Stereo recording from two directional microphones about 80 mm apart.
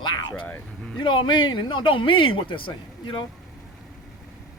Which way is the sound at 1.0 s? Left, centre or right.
Left.